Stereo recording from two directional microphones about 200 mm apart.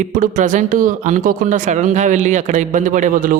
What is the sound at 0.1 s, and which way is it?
Speech, 40° right (ahead or behind).